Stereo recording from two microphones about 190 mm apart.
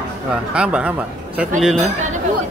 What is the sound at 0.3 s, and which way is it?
Speech, 5° right (ahead or behind).